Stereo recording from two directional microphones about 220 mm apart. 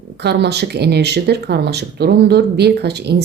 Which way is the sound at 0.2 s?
50° right (ahead or behind).